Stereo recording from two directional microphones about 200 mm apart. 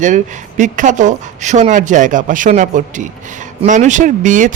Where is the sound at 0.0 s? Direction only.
40° right (ahead or behind).